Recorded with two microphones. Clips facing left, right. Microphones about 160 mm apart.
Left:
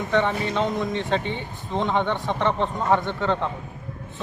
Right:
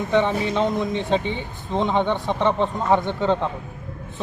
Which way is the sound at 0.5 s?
10° right (ahead or behind).